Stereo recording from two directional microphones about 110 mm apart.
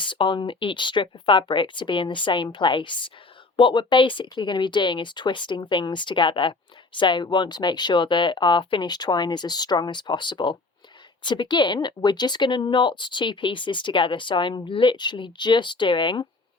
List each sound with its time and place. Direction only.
0.0 s speech: 45° left (ahead or behind)